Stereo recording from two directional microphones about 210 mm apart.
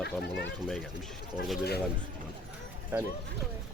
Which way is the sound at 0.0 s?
50° left (ahead or behind).